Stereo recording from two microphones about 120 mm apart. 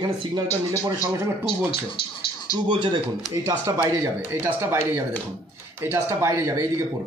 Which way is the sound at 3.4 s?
30° right (ahead or behind).